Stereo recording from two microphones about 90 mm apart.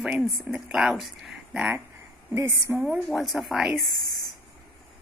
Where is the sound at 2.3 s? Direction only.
30° right (ahead or behind).